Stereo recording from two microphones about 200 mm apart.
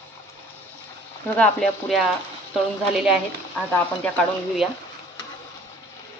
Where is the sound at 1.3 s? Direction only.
5° left (ahead or behind).